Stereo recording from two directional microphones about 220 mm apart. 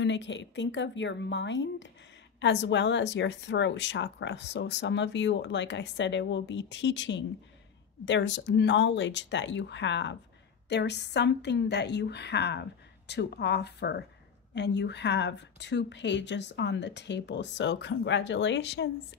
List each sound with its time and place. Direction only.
0.0 s speech: 55° left (ahead or behind)